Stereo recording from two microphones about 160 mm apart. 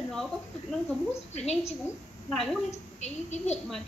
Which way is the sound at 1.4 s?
40° left (ahead or behind).